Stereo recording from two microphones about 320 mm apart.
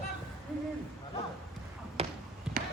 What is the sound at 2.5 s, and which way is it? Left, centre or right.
Basketball bounce, centre.